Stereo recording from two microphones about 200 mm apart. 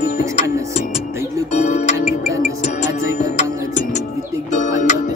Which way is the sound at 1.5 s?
35° left (ahead or behind).